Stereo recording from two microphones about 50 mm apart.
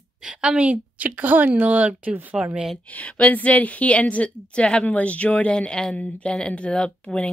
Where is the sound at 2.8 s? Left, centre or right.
Left.